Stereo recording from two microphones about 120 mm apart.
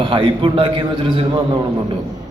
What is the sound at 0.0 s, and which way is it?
A man's voice, 45° right (ahead or behind).